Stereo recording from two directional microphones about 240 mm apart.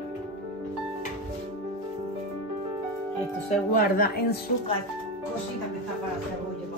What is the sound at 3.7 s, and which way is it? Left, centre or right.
Speech, left.